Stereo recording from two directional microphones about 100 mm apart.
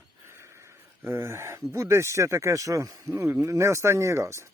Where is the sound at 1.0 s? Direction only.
25° right (ahead or behind).